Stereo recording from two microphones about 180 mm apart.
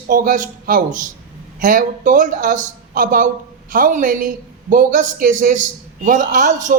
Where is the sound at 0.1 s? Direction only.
50° right (ahead or behind).